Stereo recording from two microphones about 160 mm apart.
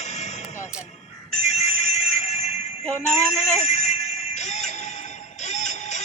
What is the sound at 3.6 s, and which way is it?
Music, 45° left (ahead or behind).